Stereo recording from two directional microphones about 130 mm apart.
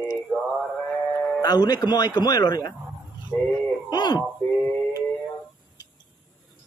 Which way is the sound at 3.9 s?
35° left (ahead or behind).